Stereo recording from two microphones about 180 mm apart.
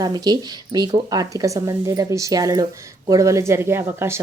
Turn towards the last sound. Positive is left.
turn(degrees=-15)  # may be behind; listen again after turning